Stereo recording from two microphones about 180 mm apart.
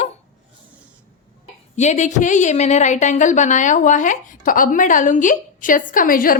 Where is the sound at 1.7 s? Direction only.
40° left (ahead or behind).